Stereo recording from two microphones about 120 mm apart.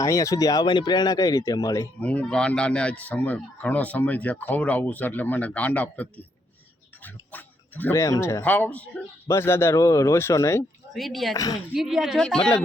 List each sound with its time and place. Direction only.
0.0 s speech: 25° left (ahead or behind)
2.0 s a man's voice: 10° left (ahead or behind)
7.0 s a sound: 15° left (ahead or behind)
7.9 s a man's voice: 25° left (ahead or behind)
10.9 s a woman's voice: centre (ahead or behind)